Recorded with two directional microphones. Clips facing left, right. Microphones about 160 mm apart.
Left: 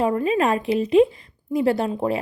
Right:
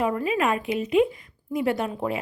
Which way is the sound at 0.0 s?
30° left (ahead or behind).